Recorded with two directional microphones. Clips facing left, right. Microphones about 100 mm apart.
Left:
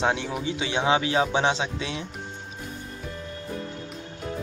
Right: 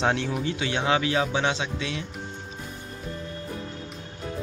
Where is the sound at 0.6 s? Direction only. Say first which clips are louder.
Left 3 dB; 20° left (ahead or behind).